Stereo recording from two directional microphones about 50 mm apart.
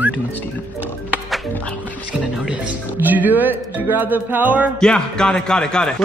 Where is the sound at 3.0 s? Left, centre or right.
Right.